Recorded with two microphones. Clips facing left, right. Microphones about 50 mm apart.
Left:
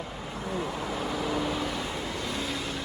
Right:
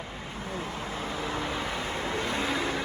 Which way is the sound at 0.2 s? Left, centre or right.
Right.